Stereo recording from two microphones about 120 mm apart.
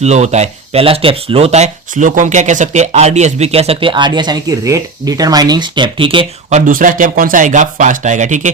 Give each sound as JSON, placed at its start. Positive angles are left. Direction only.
{"t": 0.0, "sound": "speech", "side_deg": -70}
{"t": 6.5, "sound": "speech", "side_deg": -90}